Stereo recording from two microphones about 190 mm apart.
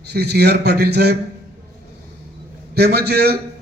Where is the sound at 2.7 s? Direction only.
60° right (ahead or behind).